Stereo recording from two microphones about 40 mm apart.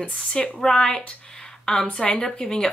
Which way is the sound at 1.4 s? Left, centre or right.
Centre.